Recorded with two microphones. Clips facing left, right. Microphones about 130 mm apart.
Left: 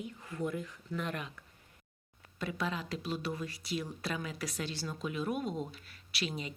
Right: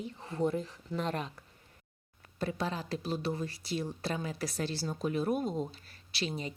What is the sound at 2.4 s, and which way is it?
Speech, 35° right (ahead or behind).